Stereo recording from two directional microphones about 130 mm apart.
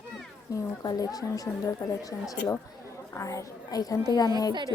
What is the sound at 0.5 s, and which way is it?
Speech, 25° left (ahead or behind).